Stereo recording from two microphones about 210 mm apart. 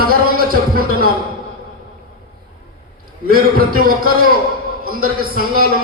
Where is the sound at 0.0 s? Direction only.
45° right (ahead or behind).